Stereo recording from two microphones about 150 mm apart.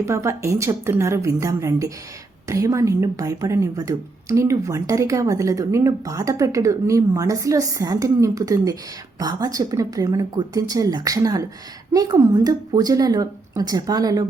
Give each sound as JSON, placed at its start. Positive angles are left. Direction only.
{"t": 0.0, "sound": "speech", "side_deg": -20}